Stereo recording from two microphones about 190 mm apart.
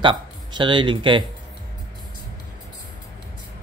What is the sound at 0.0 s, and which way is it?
Speech, 25° right (ahead or behind).